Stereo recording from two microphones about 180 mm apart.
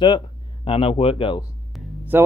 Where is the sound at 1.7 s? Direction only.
10° right (ahead or behind).